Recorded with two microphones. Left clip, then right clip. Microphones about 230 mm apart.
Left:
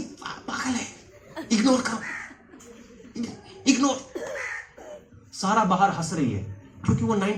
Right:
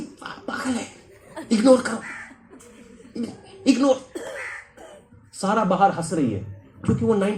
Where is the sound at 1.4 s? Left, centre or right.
Centre.